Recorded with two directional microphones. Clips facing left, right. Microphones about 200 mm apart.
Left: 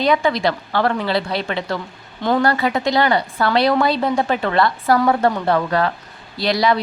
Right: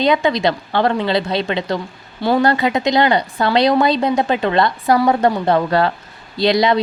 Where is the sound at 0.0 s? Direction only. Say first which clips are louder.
Right 2 dB; 20° right (ahead or behind).